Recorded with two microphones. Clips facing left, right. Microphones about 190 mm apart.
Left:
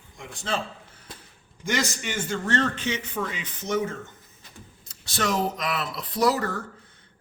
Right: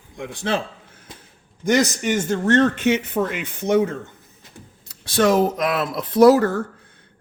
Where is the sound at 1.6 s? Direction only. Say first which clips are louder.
Right 9 dB; 40° right (ahead or behind); by 3.9 s 60° right (ahead or behind).